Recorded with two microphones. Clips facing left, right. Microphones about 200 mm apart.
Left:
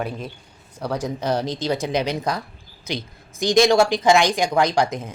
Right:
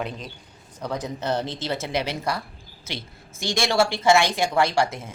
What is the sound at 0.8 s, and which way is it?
A woman's voice, 10° left (ahead or behind).